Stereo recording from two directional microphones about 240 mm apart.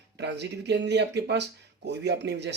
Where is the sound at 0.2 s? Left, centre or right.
Right.